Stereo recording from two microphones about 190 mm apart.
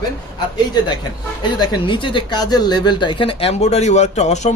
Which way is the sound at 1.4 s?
25° left (ahead or behind).